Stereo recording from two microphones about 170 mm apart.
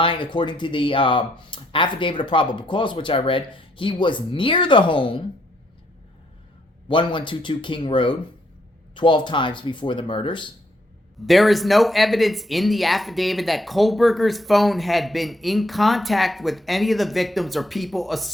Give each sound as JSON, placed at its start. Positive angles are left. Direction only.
{"t": 0.0, "sound": "speech", "side_deg": 30}
{"t": 6.8, "sound": "speech", "side_deg": 30}
{"t": 11.3, "sound": "speech", "side_deg": 0}